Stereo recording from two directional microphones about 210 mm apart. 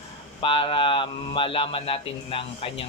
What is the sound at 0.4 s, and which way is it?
Speech, 25° left (ahead or behind).